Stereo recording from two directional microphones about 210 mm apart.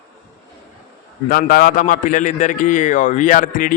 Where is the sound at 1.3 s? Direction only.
45° left (ahead or behind).